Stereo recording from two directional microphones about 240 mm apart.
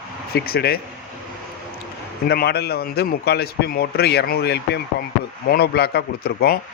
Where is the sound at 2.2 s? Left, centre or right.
Left.